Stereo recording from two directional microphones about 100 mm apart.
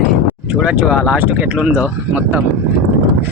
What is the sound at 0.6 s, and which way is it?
Speech, 10° right (ahead or behind).